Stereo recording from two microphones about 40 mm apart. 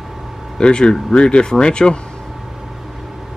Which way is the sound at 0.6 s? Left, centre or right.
Left.